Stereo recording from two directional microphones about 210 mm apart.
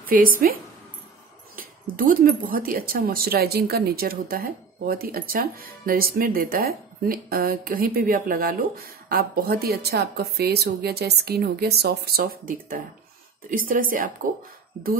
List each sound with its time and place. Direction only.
0.0 s speech: 40° right (ahead or behind)
1.6 s a woman's voice: 40° right (ahead or behind)